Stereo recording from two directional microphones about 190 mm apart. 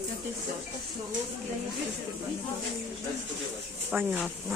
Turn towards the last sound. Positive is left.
turn(degrees=-10)  # may be behind; listen again after turning